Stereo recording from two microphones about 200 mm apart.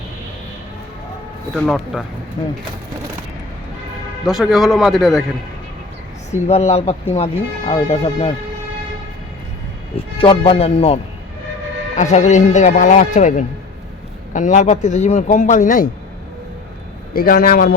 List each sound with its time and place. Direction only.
1.5 s a man's voice: centre (ahead or behind)
2.4 s a man's voice: 20° left (ahead or behind)
4.3 s a man's voice: centre (ahead or behind)
6.3 s speech: 30° left (ahead or behind)
10.2 s a man's voice: 25° left (ahead or behind)
17.2 s a man's voice: 45° left (ahead or behind)